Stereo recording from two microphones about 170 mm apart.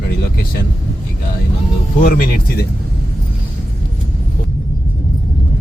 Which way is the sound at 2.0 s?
55° left (ahead or behind).